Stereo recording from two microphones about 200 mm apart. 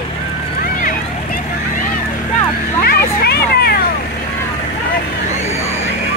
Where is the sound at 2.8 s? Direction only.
50° left (ahead or behind).